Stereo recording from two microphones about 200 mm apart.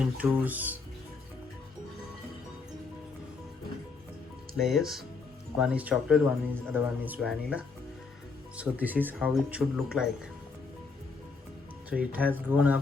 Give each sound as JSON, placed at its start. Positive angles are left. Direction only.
{"t": 0.0, "sound": "speech", "side_deg": -5}
{"t": 4.5, "sound": "speech", "side_deg": 0}
{"t": 11.9, "sound": "speech", "side_deg": -10}